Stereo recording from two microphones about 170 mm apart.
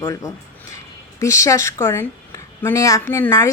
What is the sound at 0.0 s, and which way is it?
A woman's voice, 20° left (ahead or behind).